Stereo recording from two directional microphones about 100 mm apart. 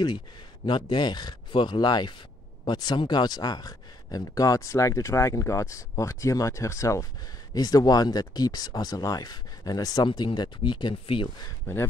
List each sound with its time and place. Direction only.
0.7 s speech: 55° left (ahead or behind)
11.7 s speech: 25° left (ahead or behind)